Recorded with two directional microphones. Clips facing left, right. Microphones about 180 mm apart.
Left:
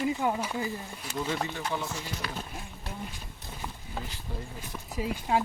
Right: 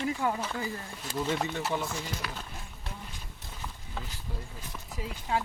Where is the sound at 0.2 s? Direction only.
15° left (ahead or behind).